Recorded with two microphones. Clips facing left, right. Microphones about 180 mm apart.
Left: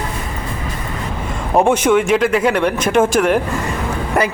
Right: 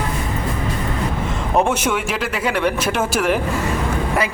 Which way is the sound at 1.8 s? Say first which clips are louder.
Left 8 dB; 5° right (ahead or behind).